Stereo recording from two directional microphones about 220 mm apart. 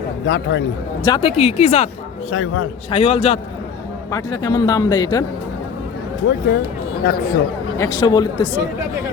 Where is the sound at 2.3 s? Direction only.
65° left (ahead or behind).